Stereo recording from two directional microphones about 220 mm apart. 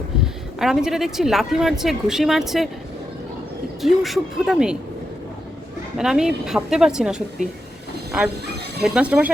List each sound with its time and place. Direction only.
0.6 s speech: centre (ahead or behind)
3.8 s speech: centre (ahead or behind)
6.0 s speech: 5° right (ahead or behind)
8.8 s speech: 5° right (ahead or behind)